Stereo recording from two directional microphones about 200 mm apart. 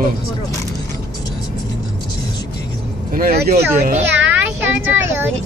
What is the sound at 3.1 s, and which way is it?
Speech, 50° right (ahead or behind).